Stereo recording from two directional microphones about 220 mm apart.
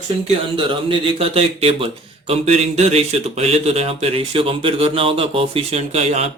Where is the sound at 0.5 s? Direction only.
25° right (ahead or behind).